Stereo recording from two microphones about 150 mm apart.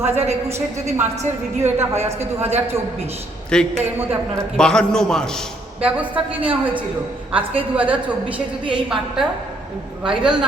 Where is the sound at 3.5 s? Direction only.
5° left (ahead or behind).